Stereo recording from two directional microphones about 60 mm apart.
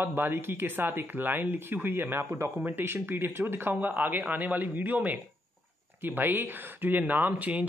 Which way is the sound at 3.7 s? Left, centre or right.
Right.